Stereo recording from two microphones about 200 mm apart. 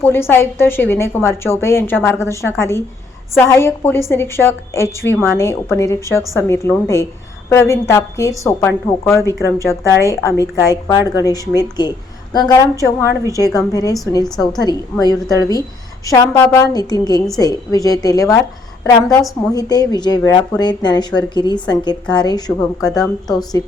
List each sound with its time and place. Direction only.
0.0 s a woman's voice: 10° left (ahead or behind)